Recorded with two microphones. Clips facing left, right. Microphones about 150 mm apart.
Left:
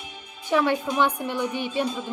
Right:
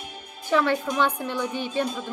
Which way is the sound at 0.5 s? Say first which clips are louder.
Even; 15° left (ahead or behind).